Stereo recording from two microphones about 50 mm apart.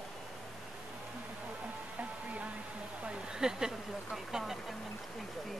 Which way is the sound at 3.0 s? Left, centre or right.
Centre.